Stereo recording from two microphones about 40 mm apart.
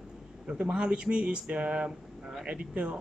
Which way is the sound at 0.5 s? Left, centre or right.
Right.